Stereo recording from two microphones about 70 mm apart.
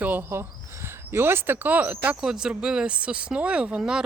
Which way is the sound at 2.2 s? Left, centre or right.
Centre.